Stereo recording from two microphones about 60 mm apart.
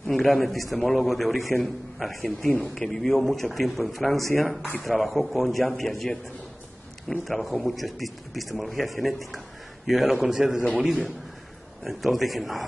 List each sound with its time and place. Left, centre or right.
0.0 s a man's voice: centre
2.4 s speech: centre
2.7 s a man's voice: centre
11.8 s a man's voice: centre